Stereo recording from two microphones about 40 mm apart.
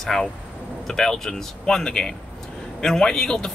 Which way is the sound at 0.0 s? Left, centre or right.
Centre.